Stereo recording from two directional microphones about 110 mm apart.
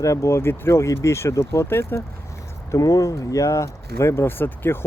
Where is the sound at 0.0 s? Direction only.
30° left (ahead or behind).